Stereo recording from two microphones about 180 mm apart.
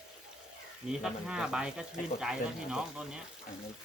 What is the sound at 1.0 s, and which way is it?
Speech, 5° right (ahead or behind).